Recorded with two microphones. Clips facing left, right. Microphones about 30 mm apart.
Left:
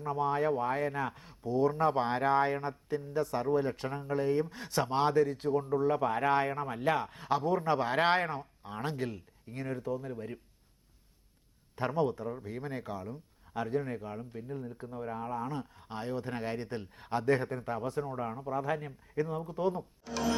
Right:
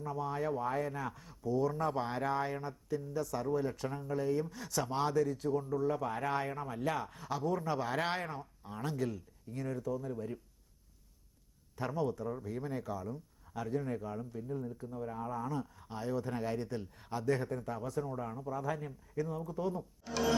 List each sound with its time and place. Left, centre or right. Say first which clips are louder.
0.0 s speech: left 6 dB; left
11.8 s speech: left 4 dB; left
20.1 s a sound: even; centre